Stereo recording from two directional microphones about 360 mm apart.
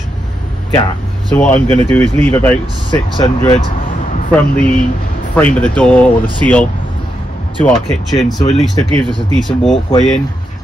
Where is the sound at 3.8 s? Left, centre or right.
Left.